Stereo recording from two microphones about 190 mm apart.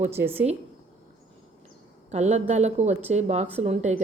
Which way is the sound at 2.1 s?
35° right (ahead or behind).